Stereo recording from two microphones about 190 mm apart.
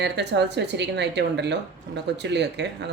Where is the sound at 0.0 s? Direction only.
65° right (ahead or behind).